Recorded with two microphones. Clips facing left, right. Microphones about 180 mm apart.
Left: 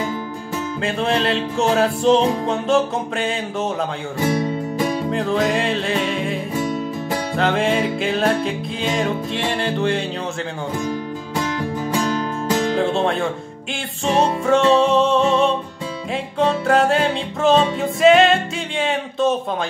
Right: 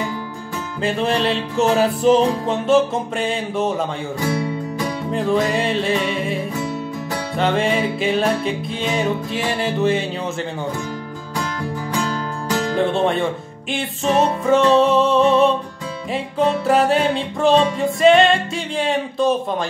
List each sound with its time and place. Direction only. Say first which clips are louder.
0.8 s music: right 2 dB; centre (ahead or behind)
4.2 s music: left 3 dB; 20° left (ahead or behind)
5.1 s music: right 4 dB; centre (ahead or behind)
11.9 s music: left 3 dB; 20° left (ahead or behind)
12.7 s music: right 1 dB; centre (ahead or behind)